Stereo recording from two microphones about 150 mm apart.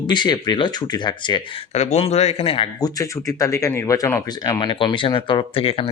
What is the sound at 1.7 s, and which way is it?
Speech, 45° left (ahead or behind).